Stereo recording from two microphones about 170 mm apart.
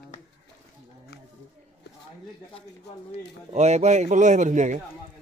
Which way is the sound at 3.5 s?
40° right (ahead or behind).